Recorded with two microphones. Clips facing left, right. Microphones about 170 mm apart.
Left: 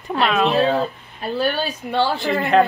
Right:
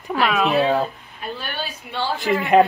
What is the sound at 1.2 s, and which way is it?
Speech, 40° left (ahead or behind).